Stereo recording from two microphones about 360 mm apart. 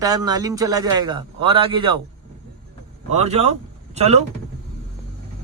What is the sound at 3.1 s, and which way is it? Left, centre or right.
A man's voice, centre.